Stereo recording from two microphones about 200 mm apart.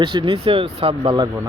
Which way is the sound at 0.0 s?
25° right (ahead or behind).